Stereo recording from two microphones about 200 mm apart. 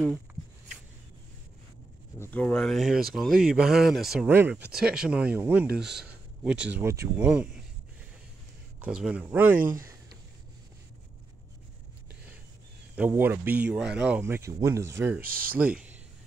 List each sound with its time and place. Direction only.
2.1 s speech: 10° left (ahead or behind)
8.7 s speech: 5° right (ahead or behind)
12.9 s speech: 10° right (ahead or behind)
15.2 s speech: 45° right (ahead or behind)
15.5 s speech: 5° right (ahead or behind)